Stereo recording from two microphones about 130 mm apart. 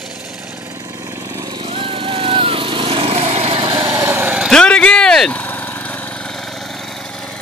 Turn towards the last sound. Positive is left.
turn(degrees=10)  # may be behind; listen again after turning